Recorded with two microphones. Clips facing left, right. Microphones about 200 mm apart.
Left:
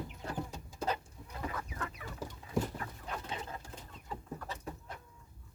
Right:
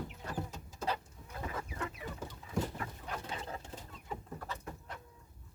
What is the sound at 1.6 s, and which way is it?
Chicken, 25° right (ahead or behind).